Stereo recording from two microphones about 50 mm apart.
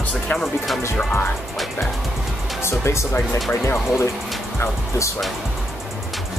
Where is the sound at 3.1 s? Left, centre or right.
Left.